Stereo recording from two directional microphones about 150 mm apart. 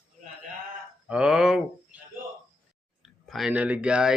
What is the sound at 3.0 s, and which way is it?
Speech, centre (ahead or behind).